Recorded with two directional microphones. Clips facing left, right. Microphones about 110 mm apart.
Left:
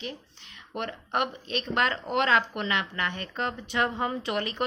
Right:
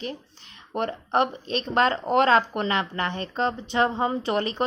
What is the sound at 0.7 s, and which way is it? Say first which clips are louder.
A woman's voice: right 6 dB; 35° right (ahead or behind).